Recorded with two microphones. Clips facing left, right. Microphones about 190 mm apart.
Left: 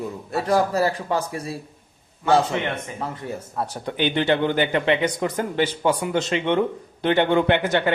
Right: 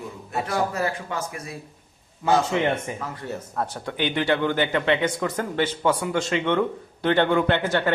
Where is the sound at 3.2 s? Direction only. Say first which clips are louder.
Even; 10° left (ahead or behind).